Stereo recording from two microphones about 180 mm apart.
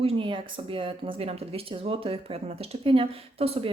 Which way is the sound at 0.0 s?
30° right (ahead or behind).